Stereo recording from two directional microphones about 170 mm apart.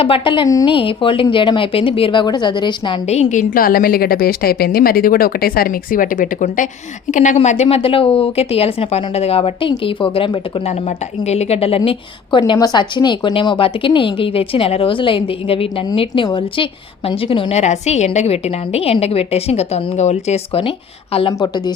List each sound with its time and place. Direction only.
0.0 s a woman's voice: 30° left (ahead or behind)
3.1 s a woman's voice: 45° left (ahead or behind)
10.7 s a woman's voice: 40° left (ahead or behind); by 21.7 s 25° left (ahead or behind)